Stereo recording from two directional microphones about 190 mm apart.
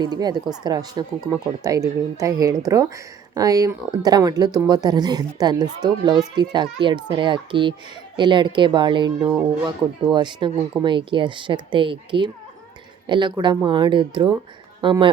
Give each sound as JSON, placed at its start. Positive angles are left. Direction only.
{"t": 0.0, "sound": "a woman's voice", "side_deg": -20}